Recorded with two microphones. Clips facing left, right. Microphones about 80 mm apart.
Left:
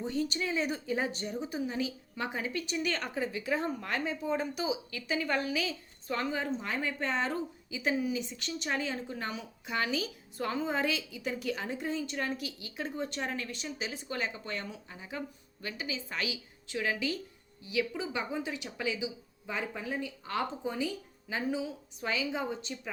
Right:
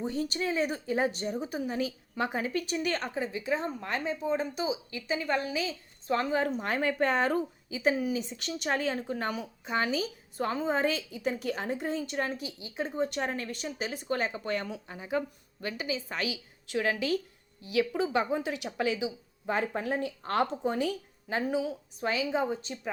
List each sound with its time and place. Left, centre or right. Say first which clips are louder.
0.1 s a woman's voice: right 1 dB; right
3.2 s a woman's voice: right 1 dB; right
6.6 s a woman's voice: right 6 dB; right
12.4 s a woman's voice: right 3 dB; right
18.8 s speech: right 5 dB; right
22.0 s a woman's voice: right 4 dB; right